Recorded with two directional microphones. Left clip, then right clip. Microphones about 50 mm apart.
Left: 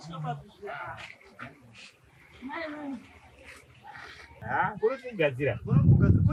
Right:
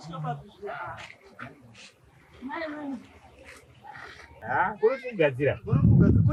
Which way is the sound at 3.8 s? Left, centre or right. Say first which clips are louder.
Right 2 dB; centre.